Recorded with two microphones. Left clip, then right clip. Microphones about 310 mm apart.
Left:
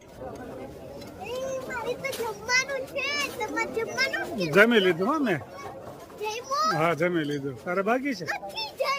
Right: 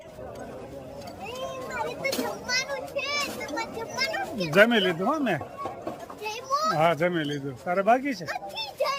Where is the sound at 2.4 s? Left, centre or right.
Centre.